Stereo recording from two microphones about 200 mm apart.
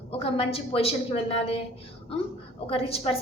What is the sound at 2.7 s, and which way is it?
Speech, 30° left (ahead or behind).